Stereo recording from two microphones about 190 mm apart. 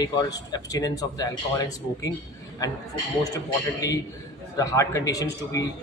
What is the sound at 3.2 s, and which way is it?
A man's voice, 20° left (ahead or behind).